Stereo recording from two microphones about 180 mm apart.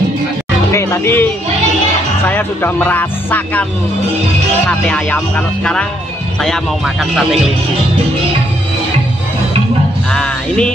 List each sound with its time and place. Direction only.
0.7 s music: 15° left (ahead or behind)
2.2 s speech: 10° left (ahead or behind)
4.6 s music: 5° left (ahead or behind)
10.1 s music: 5° left (ahead or behind)